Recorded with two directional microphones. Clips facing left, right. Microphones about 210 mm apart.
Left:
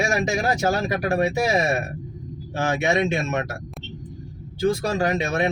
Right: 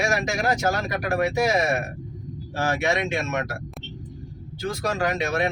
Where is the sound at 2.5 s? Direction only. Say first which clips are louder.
Left 2 dB; 20° left (ahead or behind).